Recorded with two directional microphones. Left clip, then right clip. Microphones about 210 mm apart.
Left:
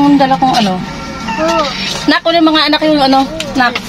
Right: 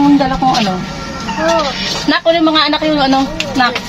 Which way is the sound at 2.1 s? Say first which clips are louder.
Left 2 dB; 50° left (ahead or behind).